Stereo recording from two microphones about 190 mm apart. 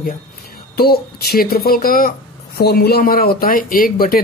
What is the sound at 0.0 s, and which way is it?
Speech, 50° left (ahead or behind).